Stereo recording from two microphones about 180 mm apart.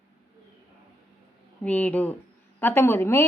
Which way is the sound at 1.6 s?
10° left (ahead or behind).